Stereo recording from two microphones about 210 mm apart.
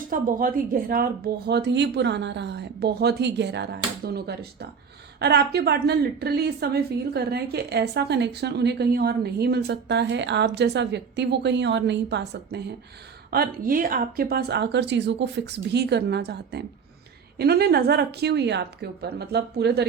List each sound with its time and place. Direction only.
0.1 s a woman's voice: 40° right (ahead or behind)